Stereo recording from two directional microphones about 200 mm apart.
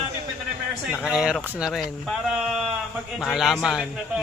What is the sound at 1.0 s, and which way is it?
A man's voice, 5° right (ahead or behind).